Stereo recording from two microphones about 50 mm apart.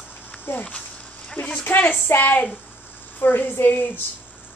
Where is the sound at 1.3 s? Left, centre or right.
Left.